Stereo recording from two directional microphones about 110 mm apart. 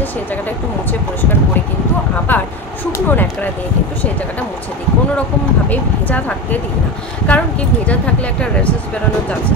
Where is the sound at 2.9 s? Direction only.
15° left (ahead or behind).